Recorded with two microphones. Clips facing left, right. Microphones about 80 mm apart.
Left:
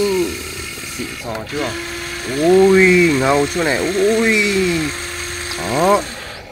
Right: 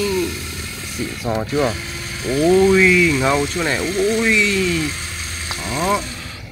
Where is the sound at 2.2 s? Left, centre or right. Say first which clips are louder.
Left 2 dB; left.